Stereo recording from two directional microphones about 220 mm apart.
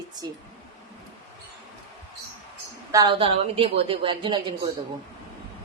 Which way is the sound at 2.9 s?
20° right (ahead or behind).